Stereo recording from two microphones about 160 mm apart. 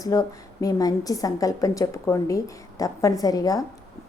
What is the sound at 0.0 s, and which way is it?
A woman's voice, 20° left (ahead or behind).